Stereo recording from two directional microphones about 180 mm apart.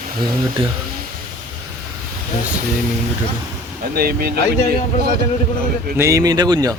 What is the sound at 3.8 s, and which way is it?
Speech, 55° right (ahead or behind).